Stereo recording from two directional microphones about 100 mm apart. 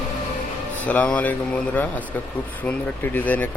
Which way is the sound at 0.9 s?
15° left (ahead or behind).